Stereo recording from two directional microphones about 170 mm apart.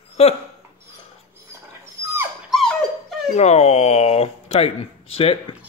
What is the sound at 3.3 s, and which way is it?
Speech, 40° left (ahead or behind).